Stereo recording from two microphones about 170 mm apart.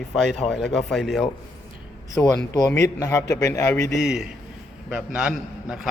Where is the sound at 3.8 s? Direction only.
Centre (ahead or behind).